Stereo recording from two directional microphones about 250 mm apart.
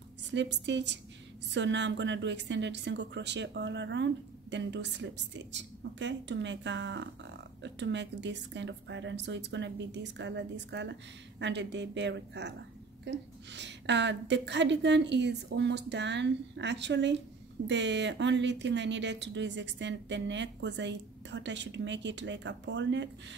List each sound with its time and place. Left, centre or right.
0.3 s a woman's voice: right